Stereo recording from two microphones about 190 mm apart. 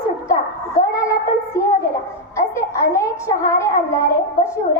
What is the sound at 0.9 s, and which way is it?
A child's voice, 15° left (ahead or behind).